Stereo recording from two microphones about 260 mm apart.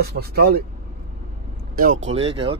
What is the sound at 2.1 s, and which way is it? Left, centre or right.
Speech, right.